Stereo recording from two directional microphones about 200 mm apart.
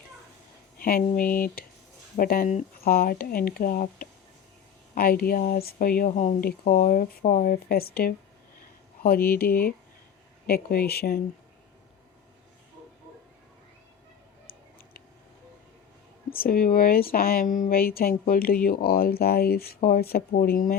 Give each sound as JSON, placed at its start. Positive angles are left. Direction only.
{"t": 0.8, "sound": "speech", "side_deg": 45}
{"t": 16.3, "sound": "speech", "side_deg": 45}